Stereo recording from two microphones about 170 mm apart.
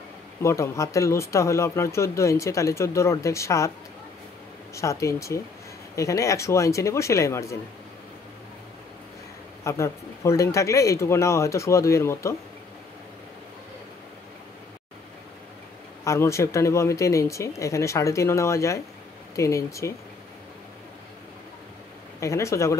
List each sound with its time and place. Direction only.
0.4 s speech: 15° left (ahead or behind)
4.7 s speech: 15° left (ahead or behind)
9.7 s speech: 15° left (ahead or behind)
16.0 s speech: 15° left (ahead or behind)
22.2 s speech: 15° left (ahead or behind)